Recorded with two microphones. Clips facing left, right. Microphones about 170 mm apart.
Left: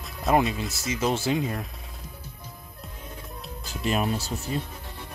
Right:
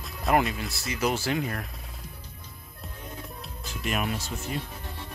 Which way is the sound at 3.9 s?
35° left (ahead or behind).